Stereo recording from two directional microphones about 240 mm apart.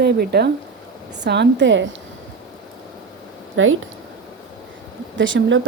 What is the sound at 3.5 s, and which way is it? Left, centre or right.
Speech, right.